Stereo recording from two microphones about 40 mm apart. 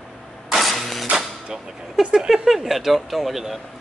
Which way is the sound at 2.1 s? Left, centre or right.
Centre.